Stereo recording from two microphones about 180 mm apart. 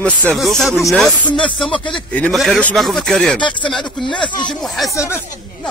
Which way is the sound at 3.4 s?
25° left (ahead or behind).